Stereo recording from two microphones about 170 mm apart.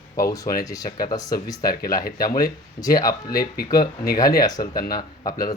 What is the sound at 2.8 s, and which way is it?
Speech, 20° left (ahead or behind).